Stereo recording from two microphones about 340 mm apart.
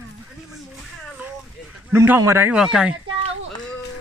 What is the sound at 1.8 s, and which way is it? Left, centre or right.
Speech, centre.